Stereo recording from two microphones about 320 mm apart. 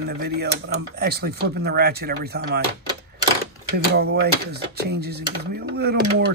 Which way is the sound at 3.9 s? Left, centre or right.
Right.